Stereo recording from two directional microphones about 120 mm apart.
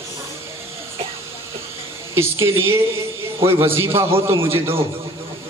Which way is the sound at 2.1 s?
20° right (ahead or behind).